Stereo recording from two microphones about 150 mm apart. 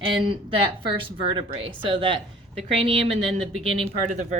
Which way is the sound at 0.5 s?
35° right (ahead or behind).